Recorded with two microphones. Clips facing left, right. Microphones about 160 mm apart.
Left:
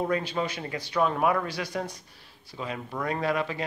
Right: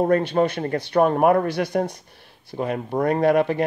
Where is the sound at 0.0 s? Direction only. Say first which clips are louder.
Right 9 dB; 55° right (ahead or behind).